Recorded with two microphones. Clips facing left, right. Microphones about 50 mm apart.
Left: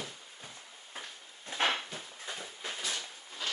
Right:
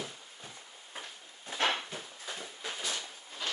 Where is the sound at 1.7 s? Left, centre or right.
Centre.